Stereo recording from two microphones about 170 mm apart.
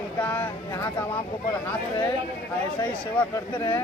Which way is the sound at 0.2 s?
10° left (ahead or behind).